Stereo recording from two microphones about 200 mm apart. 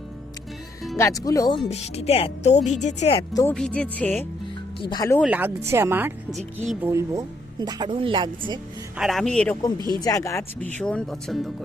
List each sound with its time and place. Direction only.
0.9 s speech: 15° left (ahead or behind); by 3.2 s 35° left (ahead or behind)
3.3 s speech: 10° left (ahead or behind)
4.8 s speech: 20° left (ahead or behind)
5.2 s speech: 10° right (ahead or behind)
9.0 s speech: centre (ahead or behind)
9.7 s speech: 20° right (ahead or behind)
10.0 s speech: 15° left (ahead or behind)
10.8 s speech: 5° left (ahead or behind)